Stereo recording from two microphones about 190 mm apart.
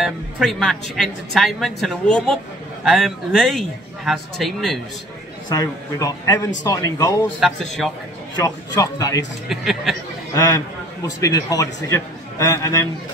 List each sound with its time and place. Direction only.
0.0 s speech: centre (ahead or behind)
5.5 s a man's voice: 20° left (ahead or behind)
7.3 s speech: centre (ahead or behind)
8.4 s a man's voice: 20° left (ahead or behind)
9.5 s speech: centre (ahead or behind)
10.3 s a man's voice: 20° left (ahead or behind)